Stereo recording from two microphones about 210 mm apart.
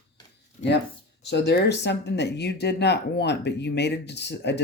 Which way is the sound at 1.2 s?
55° left (ahead or behind).